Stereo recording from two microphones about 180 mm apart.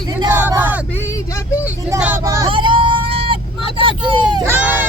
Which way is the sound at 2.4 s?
30° right (ahead or behind).